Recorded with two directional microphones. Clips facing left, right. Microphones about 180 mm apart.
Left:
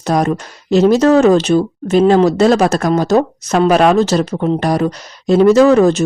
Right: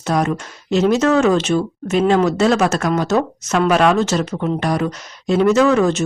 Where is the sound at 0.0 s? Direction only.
40° left (ahead or behind).